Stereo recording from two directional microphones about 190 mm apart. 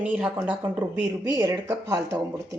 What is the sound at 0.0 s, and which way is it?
A woman's voice, 5° right (ahead or behind).